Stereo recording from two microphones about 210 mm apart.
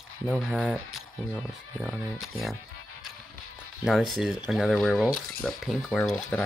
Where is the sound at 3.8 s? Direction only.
Centre (ahead or behind).